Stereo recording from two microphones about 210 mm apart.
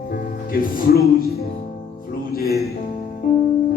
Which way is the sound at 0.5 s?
45° left (ahead or behind).